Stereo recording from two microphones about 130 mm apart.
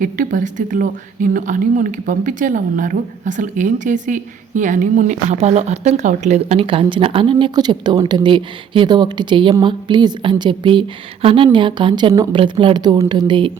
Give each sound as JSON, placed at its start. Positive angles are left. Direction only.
{"t": 0.0, "sound": "speech", "side_deg": -90}